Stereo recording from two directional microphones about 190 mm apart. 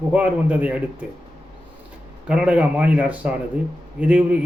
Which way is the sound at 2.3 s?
5° right (ahead or behind).